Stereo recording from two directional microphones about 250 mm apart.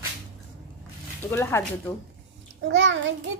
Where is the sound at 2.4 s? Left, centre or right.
Right.